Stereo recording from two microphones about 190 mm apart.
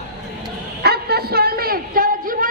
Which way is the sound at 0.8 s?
55° right (ahead or behind).